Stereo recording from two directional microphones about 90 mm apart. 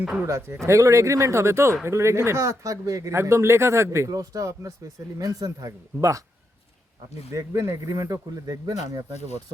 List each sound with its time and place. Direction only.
0.3 s speech: 30° right (ahead or behind)
7.3 s speech: 35° right (ahead or behind)